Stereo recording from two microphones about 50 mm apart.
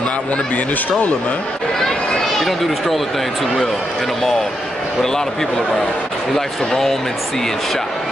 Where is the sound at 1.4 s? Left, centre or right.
Centre.